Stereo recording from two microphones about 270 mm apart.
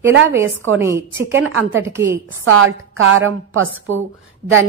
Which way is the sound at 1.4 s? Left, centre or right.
Right.